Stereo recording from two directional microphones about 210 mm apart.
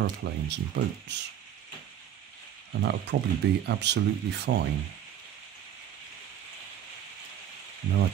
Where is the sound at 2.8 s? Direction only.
55° right (ahead or behind).